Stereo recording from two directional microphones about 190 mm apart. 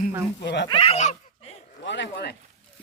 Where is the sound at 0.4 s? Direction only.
70° left (ahead or behind).